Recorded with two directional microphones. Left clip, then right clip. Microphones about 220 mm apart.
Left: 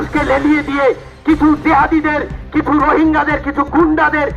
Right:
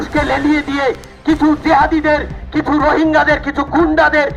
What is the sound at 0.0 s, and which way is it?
A man's voice, 40° right (ahead or behind).